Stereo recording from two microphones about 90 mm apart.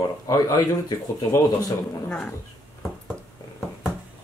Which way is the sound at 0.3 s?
40° left (ahead or behind).